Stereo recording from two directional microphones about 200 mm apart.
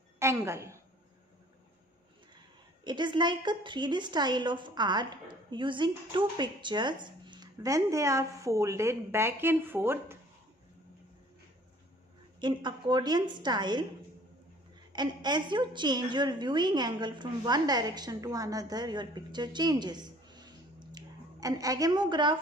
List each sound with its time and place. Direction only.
0.2 s a woman's voice: 15° right (ahead or behind)
2.8 s a woman's voice: 20° right (ahead or behind)
12.4 s a woman's voice: 20° right (ahead or behind)
14.9 s a woman's voice: 20° right (ahead or behind)